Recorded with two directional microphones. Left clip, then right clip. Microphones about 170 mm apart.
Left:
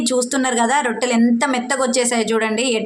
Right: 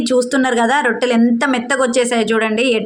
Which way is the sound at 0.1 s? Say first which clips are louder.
Right 5 dB; 20° right (ahead or behind).